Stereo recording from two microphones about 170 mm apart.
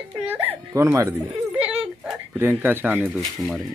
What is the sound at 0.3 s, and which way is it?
Speech, 10° right (ahead or behind).